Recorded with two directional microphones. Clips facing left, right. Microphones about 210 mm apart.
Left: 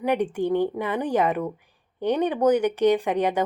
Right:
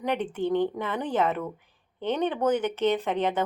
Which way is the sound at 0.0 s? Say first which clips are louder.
Left 4 dB; 10° left (ahead or behind).